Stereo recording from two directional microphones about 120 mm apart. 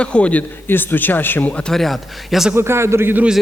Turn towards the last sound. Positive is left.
turn(degrees=-15)  # may be behind; listen again after turning